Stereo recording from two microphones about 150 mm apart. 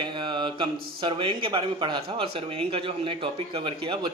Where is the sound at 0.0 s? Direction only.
30° right (ahead or behind).